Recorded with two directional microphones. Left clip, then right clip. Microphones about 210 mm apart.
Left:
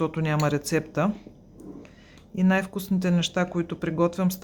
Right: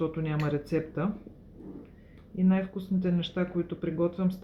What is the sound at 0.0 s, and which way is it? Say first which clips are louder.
Speech: left 6 dB; 40° left (ahead or behind).